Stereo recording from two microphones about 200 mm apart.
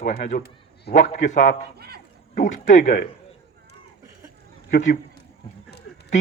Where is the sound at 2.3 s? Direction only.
40° left (ahead or behind).